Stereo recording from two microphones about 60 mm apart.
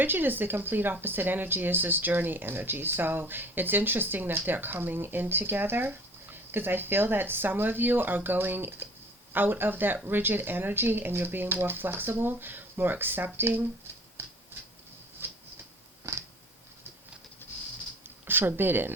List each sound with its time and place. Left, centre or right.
0.0 s speech: right
14.2 s a sound: right
16.1 s cat: right
17.4 s typing: left
18.3 s speech: right